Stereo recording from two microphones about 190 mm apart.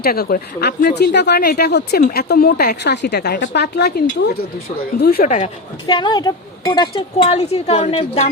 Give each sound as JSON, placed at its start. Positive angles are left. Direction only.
{"t": 0.0, "sound": "speech", "side_deg": 55}
{"t": 5.9, "sound": "speech", "side_deg": 25}